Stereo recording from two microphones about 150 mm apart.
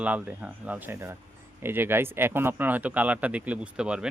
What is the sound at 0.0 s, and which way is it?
Speech, 10° right (ahead or behind).